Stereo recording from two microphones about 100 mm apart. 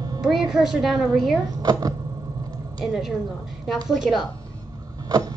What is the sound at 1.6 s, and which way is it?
Speech, 40° right (ahead or behind).